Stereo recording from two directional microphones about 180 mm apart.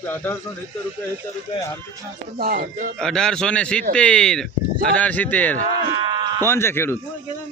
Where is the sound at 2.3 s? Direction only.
55° right (ahead or behind).